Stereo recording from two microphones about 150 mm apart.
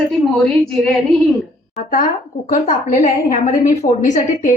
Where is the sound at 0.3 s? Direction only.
Centre (ahead or behind).